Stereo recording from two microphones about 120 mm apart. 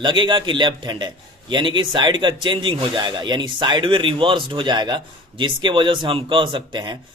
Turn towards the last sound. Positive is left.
turn(degrees=-40)  # may be behind; listen again after turning